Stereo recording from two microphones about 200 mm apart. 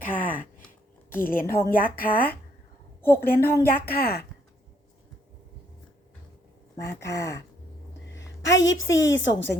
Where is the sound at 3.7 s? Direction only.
50° left (ahead or behind).